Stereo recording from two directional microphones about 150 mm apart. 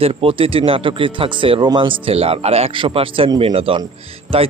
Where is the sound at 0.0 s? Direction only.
40° right (ahead or behind).